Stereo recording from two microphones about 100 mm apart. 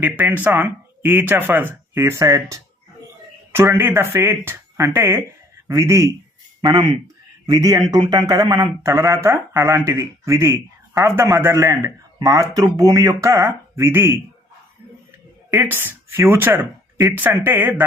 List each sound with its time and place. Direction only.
0.0 s speech: 15° right (ahead or behind); by 6.1 s 35° right (ahead or behind)
6.6 s speech: 50° right (ahead or behind)
7.4 s a man's voice: 40° right (ahead or behind)
8.8 s speech: 30° right (ahead or behind)
15.4 s speech: 20° right (ahead or behind)